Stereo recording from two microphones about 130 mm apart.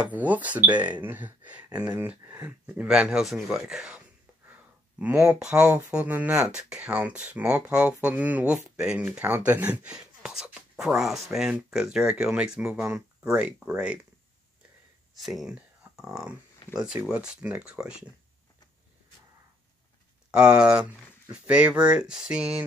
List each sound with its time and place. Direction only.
0.1 s speech: 10° right (ahead or behind)
4.9 s speech: 15° right (ahead or behind)
5.4 s speech: 5° right (ahead or behind)
15.1 s speech: centre (ahead or behind)
16.7 s speech: 5° right (ahead or behind)
20.2 s speech: 5° right (ahead or behind)